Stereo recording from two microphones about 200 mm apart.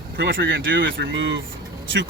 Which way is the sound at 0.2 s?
60° right (ahead or behind).